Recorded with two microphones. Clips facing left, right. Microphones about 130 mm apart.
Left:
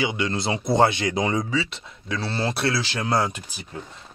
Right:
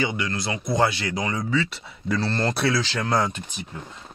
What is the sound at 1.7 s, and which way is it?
Speech, centre (ahead or behind).